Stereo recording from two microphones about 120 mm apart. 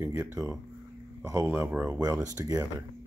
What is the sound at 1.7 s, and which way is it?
Speech, 15° right (ahead or behind).